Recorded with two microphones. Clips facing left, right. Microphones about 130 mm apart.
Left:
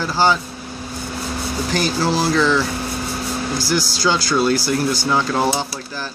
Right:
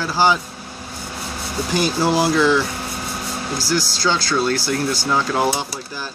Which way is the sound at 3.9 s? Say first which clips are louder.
Left 3 dB; 5° left (ahead or behind).